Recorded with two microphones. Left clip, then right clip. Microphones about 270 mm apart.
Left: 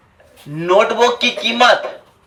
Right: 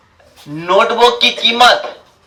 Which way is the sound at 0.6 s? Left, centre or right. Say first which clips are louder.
Right 2 dB; centre.